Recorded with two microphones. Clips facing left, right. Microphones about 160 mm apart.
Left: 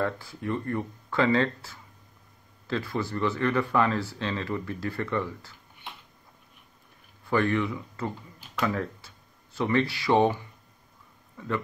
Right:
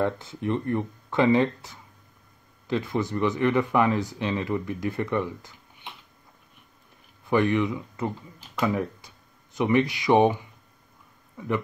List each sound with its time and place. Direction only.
0.0 s speech: 20° right (ahead or behind)
7.2 s speech: 20° right (ahead or behind)